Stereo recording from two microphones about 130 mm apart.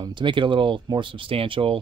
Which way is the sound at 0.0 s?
40° right (ahead or behind).